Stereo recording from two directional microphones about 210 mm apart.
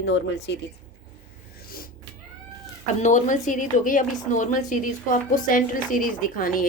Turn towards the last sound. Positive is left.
turn(degrees=40)  # may be behind; listen again after turning